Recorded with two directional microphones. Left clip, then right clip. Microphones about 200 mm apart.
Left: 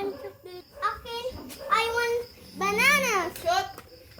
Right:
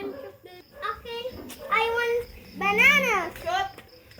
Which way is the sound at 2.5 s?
30° left (ahead or behind).